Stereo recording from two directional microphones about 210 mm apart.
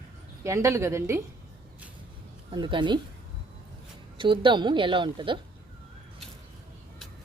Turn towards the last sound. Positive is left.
turn(degrees=-25)  # may be behind; listen again after turning